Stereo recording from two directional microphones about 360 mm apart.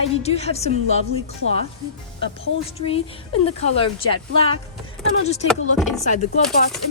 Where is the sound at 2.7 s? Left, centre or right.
Centre.